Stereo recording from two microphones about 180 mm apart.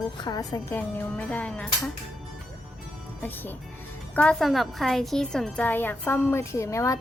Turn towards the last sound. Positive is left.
turn(degrees=15)  # may be behind; listen again after turning